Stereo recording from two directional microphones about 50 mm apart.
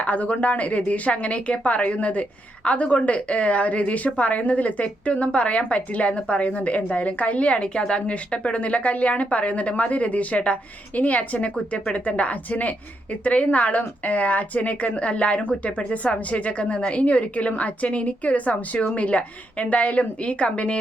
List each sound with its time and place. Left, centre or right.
0.0 s speech: left